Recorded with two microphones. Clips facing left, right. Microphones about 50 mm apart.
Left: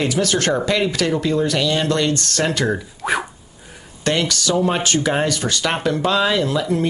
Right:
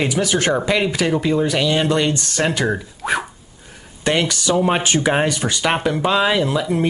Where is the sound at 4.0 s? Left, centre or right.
Centre.